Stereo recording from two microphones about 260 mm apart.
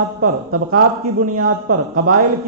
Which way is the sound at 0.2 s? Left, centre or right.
Right.